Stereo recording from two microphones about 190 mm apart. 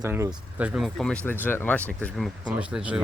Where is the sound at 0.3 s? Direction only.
5° right (ahead or behind).